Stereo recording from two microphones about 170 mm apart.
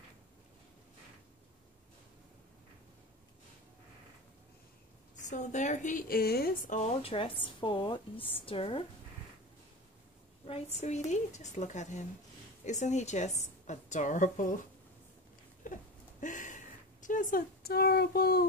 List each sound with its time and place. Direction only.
5.2 s a woman's voice: 45° left (ahead or behind); by 6.5 s 65° left (ahead or behind)
6.7 s a woman's voice: 40° left (ahead or behind)
10.4 s a woman's voice: 35° left (ahead or behind)
15.6 s a sound: 50° left (ahead or behind)